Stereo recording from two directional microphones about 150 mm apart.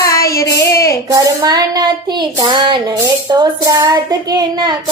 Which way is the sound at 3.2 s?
25° right (ahead or behind).